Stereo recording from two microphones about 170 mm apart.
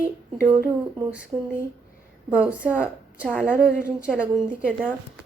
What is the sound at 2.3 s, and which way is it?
Speech, 10° right (ahead or behind).